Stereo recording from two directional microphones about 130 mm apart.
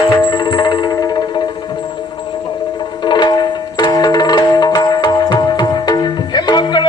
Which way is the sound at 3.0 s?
35° left (ahead or behind).